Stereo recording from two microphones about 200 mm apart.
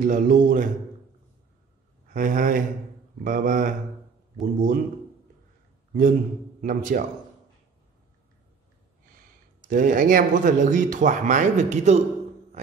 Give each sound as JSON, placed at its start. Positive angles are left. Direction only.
{"t": 0.0, "sound": "speech", "side_deg": -40}
{"t": 2.1, "sound": "speech", "side_deg": -40}
{"t": 6.6, "sound": "speech", "side_deg": -40}
{"t": 9.7, "sound": "speech", "side_deg": -45}